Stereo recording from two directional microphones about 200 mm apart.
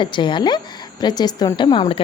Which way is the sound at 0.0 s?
25° left (ahead or behind).